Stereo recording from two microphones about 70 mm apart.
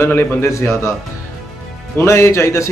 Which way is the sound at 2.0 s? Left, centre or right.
Left.